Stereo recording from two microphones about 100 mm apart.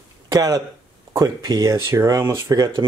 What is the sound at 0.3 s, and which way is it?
Speech, 35° right (ahead or behind).